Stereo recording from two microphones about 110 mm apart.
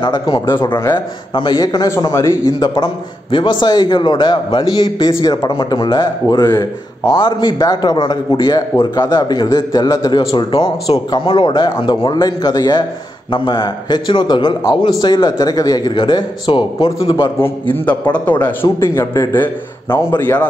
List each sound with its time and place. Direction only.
0.0 s speech: 45° left (ahead or behind)
2.8 s speech: 45° left (ahead or behind)
18.4 s a man's voice: 20° left (ahead or behind)